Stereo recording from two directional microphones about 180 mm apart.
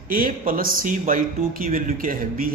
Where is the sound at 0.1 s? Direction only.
50° right (ahead or behind).